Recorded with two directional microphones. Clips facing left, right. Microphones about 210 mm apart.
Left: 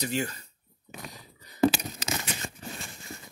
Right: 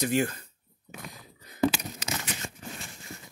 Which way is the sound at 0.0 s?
50° right (ahead or behind).